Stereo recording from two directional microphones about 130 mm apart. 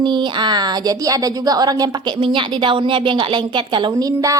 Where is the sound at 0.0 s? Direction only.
35° right (ahead or behind).